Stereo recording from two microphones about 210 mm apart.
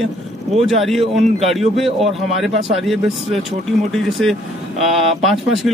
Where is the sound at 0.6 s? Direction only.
Centre (ahead or behind).